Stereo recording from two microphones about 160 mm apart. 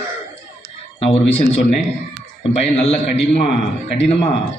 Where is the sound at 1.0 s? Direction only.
40° left (ahead or behind).